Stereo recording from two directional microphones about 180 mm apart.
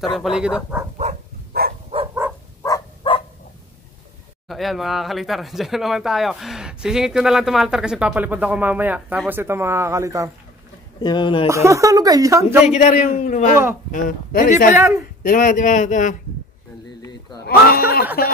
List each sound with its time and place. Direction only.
0.1 s speech: centre (ahead or behind)
1.5 s a sound: 55° right (ahead or behind)
2.2 s dog: 10° right (ahead or behind)
2.6 s a sound: 25° left (ahead or behind)
4.5 s speech: centre (ahead or behind); by 10.3 s 15° right (ahead or behind)
11.0 s speech: 25° left (ahead or behind)
11.4 s speech: 15° right (ahead or behind)
12.7 s a man's voice: 45° left (ahead or behind)
14.8 s speech: 15° right (ahead or behind)
15.2 s a man's voice: 50° left (ahead or behind)
17.5 s speech: 55° left (ahead or behind)